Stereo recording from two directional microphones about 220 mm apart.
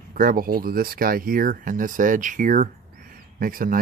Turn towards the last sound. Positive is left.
turn(degrees=-40)  # may be behind; listen again after turning